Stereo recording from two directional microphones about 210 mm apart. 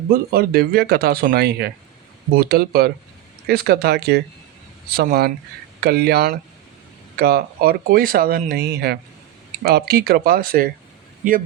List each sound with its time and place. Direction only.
0.1 s speech: 45° right (ahead or behind)